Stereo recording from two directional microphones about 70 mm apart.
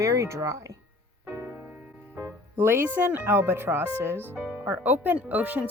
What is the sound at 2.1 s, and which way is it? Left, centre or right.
Speech, right.